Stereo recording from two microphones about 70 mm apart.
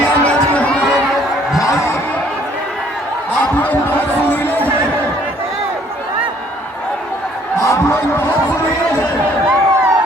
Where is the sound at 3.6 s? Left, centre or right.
Left.